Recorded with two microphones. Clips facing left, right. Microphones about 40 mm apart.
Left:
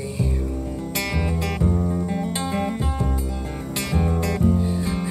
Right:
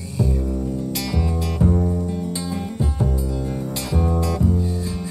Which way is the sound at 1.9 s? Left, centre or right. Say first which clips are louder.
Even; left.